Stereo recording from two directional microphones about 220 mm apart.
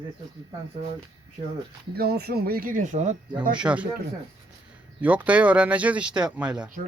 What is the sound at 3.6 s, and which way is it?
Speech, 5° right (ahead or behind).